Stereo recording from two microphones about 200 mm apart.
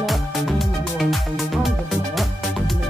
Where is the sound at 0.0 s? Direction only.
Centre (ahead or behind).